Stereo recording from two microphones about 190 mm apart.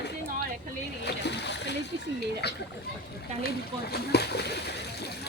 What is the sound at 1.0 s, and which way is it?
Splash, 65° left (ahead or behind).